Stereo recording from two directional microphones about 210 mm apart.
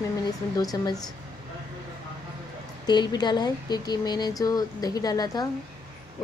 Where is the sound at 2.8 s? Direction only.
20° left (ahead or behind).